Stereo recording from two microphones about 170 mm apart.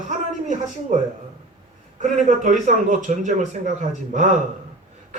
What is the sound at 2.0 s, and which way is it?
A man's voice, 45° right (ahead or behind).